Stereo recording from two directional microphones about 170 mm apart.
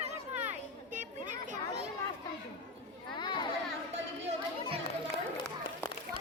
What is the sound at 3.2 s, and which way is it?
Children playing, 25° left (ahead or behind).